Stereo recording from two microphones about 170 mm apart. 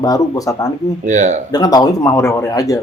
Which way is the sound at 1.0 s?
45° right (ahead or behind).